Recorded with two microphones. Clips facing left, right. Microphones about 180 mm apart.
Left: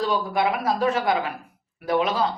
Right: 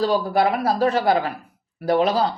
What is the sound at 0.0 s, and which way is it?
Speech, 35° right (ahead or behind).